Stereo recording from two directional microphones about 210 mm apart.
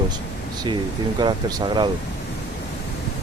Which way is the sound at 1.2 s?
20° right (ahead or behind).